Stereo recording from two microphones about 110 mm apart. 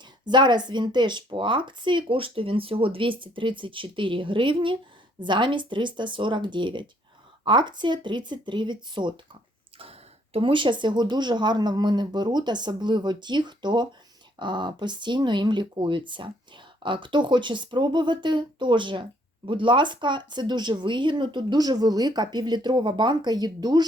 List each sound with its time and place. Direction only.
0.0 s speech: 45° right (ahead or behind)
9.7 s speech: 60° right (ahead or behind); by 23.8 s 40° right (ahead or behind)